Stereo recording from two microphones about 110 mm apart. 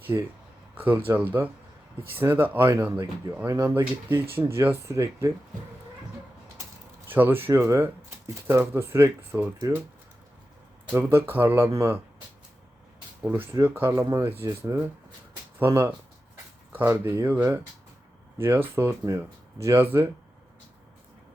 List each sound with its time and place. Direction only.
0.0 s speech: 20° right (ahead or behind)
2.9 s speech: 40° right (ahead or behind)
3.4 s speech: 30° right (ahead or behind)
7.1 s speech: 20° right (ahead or behind)
10.9 s speech: 20° right (ahead or behind)
13.2 s speech: 15° right (ahead or behind)